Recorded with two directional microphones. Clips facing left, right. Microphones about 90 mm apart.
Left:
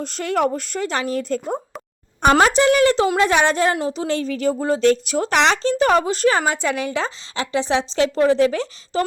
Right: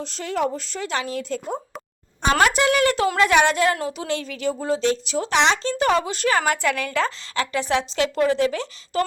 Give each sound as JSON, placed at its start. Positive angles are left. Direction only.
{"t": 0.0, "sound": "speech", "side_deg": 55}
{"t": 2.4, "sound": "a woman's voice", "side_deg": 35}
{"t": 6.4, "sound": "a woman's voice", "side_deg": 25}